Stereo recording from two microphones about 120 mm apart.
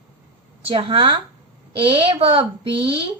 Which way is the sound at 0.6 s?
45° right (ahead or behind).